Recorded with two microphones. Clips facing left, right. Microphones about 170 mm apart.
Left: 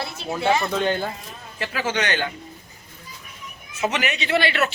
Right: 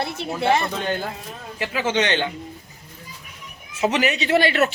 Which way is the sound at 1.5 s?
15° right (ahead or behind).